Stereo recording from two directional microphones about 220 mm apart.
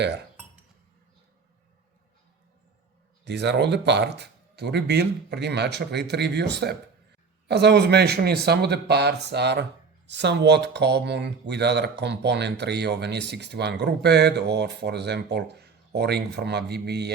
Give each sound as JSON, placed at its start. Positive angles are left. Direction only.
{"t": 3.2, "sound": "speech", "side_deg": -50}